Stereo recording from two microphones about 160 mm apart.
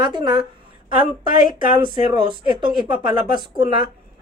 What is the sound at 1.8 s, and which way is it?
A woman's voice, 30° right (ahead or behind).